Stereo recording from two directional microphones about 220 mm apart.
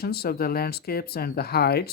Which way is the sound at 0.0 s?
45° left (ahead or behind).